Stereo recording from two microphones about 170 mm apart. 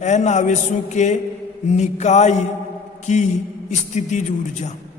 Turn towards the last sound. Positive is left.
turn(degrees=45)  # may be behind; listen again after turning